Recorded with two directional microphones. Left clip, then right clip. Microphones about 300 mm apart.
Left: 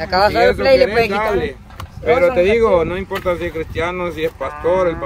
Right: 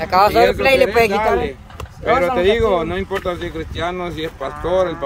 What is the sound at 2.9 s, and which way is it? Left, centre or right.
Speech, centre.